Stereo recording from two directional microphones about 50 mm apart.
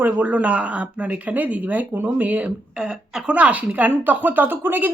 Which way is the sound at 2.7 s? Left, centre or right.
Centre.